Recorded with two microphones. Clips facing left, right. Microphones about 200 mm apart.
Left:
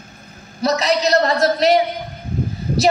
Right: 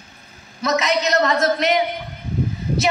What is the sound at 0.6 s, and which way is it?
A woman's voice, 35° left (ahead or behind).